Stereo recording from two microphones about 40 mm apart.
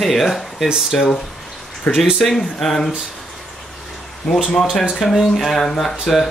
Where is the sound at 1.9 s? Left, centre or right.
Left.